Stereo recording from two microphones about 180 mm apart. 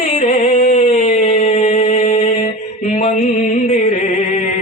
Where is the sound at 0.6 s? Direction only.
35° left (ahead or behind).